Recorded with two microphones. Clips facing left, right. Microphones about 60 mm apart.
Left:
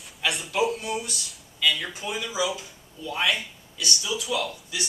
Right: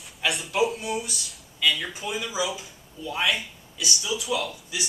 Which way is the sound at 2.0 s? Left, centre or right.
Centre.